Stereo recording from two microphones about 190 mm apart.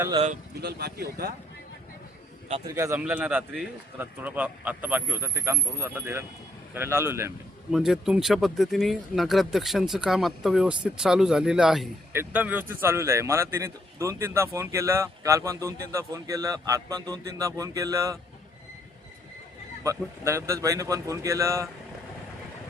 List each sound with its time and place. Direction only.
0.1 s speech: 30° right (ahead or behind)
0.6 s speech: 60° right (ahead or behind)
2.7 s a man's voice: 15° right (ahead or behind)
7.7 s a man's voice: centre (ahead or behind); by 18.2 s 15° right (ahead or behind)
19.8 s a man's voice: 15° right (ahead or behind)